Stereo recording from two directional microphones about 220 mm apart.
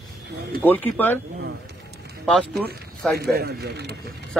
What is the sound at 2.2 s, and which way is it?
Speech, 5° left (ahead or behind).